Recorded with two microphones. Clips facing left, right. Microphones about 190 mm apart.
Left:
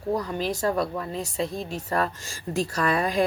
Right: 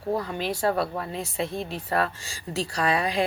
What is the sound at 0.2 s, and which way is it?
Speech, 40° left (ahead or behind).